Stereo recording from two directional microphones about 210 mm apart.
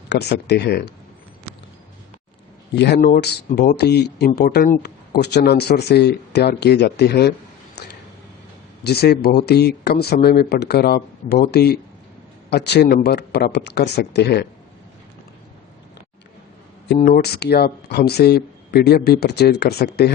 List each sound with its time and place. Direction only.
0.1 s speech: 50° left (ahead or behind)
2.7 s speech: 55° left (ahead or behind)
7.8 s a sound: 50° left (ahead or behind)
8.8 s speech: 50° left (ahead or behind)
17.0 s speech: 45° left (ahead or behind)